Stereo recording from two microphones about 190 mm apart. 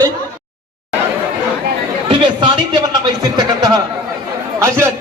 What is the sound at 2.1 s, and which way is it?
Chatter, 25° right (ahead or behind).